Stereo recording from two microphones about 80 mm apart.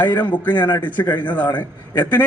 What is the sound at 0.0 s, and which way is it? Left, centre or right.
A man's voice, left.